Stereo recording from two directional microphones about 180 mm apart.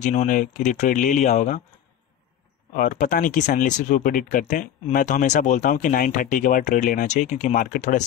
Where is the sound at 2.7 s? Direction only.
50° left (ahead or behind).